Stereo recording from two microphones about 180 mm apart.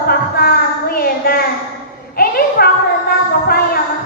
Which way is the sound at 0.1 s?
55° left (ahead or behind).